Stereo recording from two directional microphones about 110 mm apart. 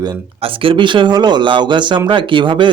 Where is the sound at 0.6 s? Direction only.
50° right (ahead or behind).